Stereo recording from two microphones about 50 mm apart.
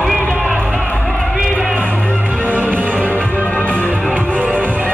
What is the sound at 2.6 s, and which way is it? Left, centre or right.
Music, right.